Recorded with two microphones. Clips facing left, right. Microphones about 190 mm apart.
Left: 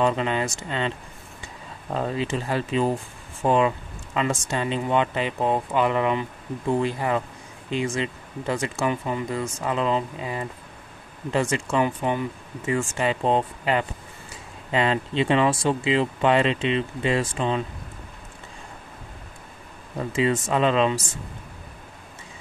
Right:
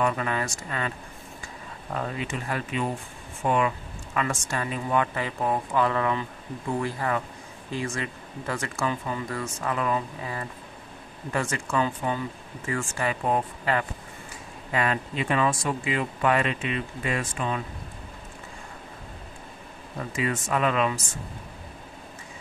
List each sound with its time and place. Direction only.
0.0 s speech: 20° left (ahead or behind)
20.2 s speech: 25° left (ahead or behind)